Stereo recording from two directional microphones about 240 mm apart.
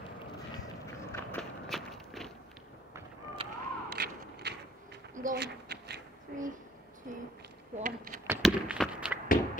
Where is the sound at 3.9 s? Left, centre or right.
Right.